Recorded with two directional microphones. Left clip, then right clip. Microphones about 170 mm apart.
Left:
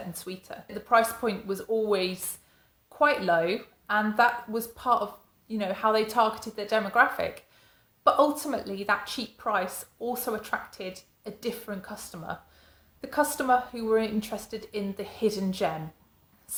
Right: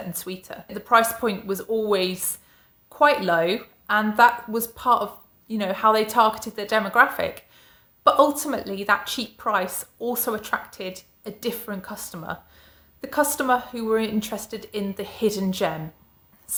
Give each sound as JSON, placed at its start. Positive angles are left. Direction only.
{"t": 0.1, "sound": "a woman's voice", "side_deg": -25}